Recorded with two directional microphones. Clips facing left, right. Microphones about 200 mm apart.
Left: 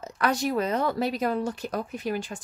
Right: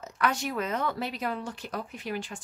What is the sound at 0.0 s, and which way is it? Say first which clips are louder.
Speech: left 4 dB; 35° left (ahead or behind).